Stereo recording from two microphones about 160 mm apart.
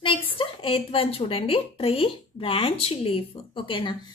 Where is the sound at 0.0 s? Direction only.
35° left (ahead or behind).